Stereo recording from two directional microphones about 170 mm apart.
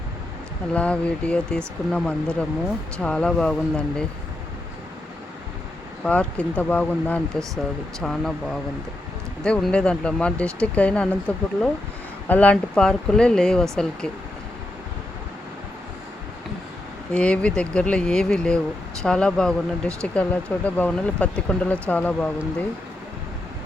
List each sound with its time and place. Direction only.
0.7 s speech: 5° left (ahead or behind)
6.1 s speech: 10° left (ahead or behind)
12.3 s speech: 10° left (ahead or behind)
17.1 s speech: 5° left (ahead or behind)